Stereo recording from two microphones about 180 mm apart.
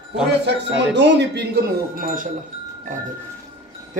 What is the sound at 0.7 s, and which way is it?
Speech, 75° right (ahead or behind).